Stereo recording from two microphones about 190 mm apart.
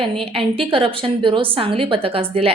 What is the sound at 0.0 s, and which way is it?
A woman's voice, 30° right (ahead or behind).